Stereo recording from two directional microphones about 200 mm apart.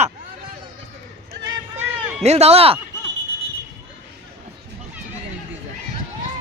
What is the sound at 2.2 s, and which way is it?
Speech, 30° right (ahead or behind).